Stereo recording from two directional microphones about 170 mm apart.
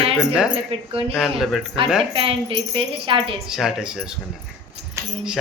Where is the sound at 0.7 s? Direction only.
35° right (ahead or behind).